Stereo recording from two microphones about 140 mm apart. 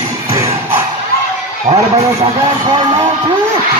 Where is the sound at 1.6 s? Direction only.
45° right (ahead or behind).